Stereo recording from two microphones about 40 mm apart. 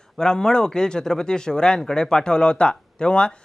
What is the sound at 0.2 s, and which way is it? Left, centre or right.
Speech, centre.